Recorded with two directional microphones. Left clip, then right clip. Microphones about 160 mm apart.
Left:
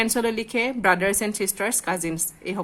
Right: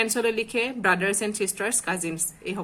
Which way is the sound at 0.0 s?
30° left (ahead or behind).